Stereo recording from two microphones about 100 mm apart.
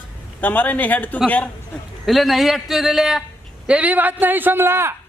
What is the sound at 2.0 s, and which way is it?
A man's voice, centre (ahead or behind).